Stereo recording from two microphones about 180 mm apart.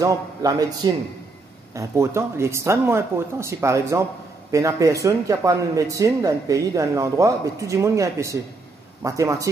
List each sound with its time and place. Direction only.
0.0 s a man's voice: 20° right (ahead or behind)